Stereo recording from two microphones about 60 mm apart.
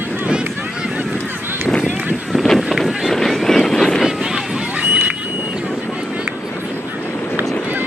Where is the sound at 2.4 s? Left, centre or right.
Centre.